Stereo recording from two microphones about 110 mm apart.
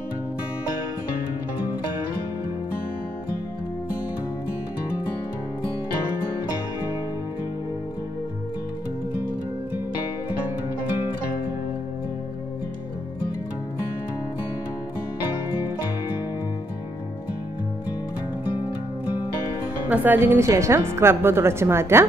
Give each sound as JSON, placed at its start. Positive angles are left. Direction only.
{"t": 19.9, "sound": "a woman's voice", "side_deg": -15}